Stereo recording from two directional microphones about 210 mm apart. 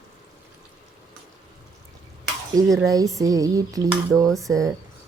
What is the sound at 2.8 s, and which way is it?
Speech, 15° right (ahead or behind).